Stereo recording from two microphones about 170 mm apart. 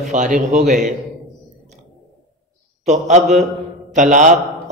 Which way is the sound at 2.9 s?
45° right (ahead or behind).